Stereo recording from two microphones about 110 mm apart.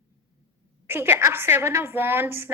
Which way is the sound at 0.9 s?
20° right (ahead or behind).